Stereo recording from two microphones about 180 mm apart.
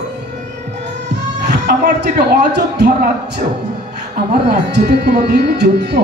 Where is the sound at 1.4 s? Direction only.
70° right (ahead or behind).